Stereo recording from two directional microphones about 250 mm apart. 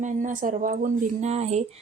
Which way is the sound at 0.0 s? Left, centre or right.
Right.